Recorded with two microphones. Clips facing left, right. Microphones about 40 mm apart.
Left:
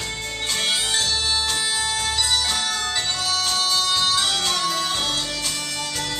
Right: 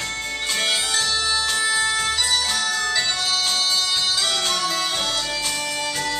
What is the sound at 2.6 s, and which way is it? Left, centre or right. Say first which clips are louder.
Music: right 2 dB; centre.